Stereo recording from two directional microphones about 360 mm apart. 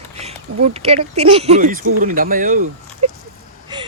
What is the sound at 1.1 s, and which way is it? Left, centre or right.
Speech, centre.